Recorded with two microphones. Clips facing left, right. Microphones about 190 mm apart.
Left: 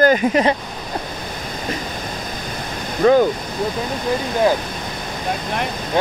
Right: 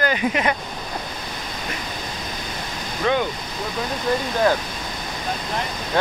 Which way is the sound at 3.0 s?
40° left (ahead or behind).